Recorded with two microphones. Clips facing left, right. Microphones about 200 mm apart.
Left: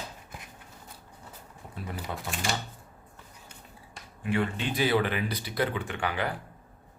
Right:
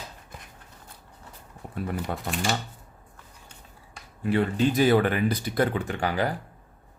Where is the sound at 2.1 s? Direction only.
50° right (ahead or behind).